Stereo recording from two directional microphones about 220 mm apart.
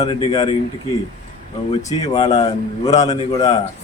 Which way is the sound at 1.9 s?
15° left (ahead or behind).